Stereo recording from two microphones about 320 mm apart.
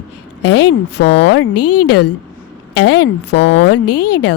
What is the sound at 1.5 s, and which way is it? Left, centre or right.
Speech, left.